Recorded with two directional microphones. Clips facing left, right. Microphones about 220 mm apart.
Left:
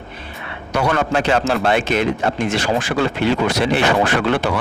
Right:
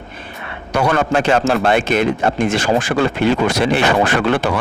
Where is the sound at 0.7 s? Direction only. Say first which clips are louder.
Right 2 dB; 50° right (ahead or behind).